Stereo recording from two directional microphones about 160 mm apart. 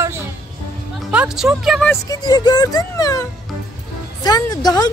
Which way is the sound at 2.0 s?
25° left (ahead or behind).